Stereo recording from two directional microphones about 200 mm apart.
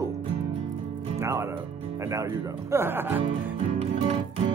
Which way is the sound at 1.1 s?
15° right (ahead or behind).